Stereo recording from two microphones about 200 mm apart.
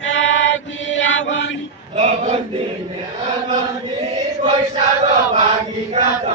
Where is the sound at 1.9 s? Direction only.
35° right (ahead or behind).